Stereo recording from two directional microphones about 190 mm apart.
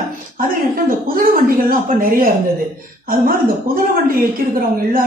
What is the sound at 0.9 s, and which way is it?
Speech, 50° right (ahead or behind).